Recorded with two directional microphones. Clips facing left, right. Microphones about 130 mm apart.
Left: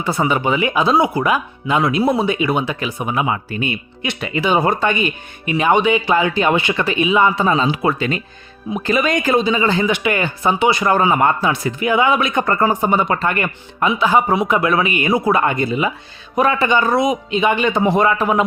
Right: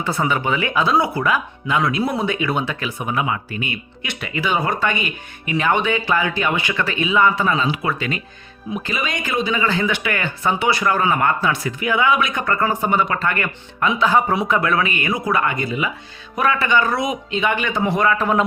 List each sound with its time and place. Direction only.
0.0 s speech: 10° left (ahead or behind)
3.3 s speech: 30° left (ahead or behind)
8.7 s speech: 40° left (ahead or behind); by 13.9 s 25° left (ahead or behind)
14.0 s speech: 10° left (ahead or behind)
18.2 s speech: 10° left (ahead or behind)